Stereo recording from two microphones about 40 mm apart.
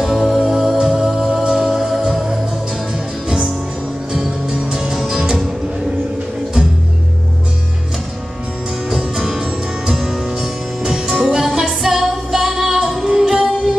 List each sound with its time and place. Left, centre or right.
0.0 s music: centre
0.7 s music: centre
3.3 s music: centre
8.9 s music: centre